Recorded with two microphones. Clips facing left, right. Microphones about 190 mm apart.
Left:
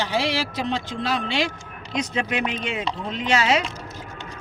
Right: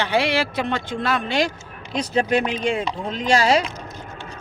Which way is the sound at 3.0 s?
35° right (ahead or behind).